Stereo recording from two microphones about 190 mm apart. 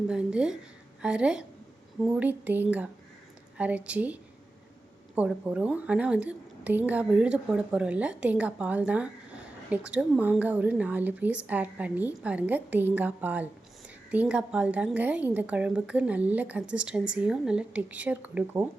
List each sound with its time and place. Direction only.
0.1 s a woman's voice: 5° right (ahead or behind)